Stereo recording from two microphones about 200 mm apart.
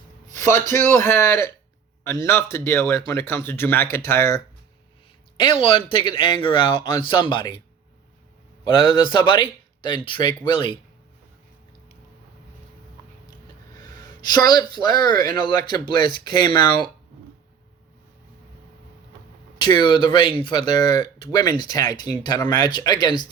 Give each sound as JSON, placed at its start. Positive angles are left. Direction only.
{"t": 0.3, "sound": "a sound", "side_deg": -40}
{"t": 0.7, "sound": "a man's voice", "side_deg": -40}
{"t": 1.0, "sound": "speech", "side_deg": 10}
{"t": 8.6, "sound": "speech", "side_deg": 25}
{"t": 13.8, "sound": "speech", "side_deg": 20}
{"t": 19.5, "sound": "speech", "side_deg": 20}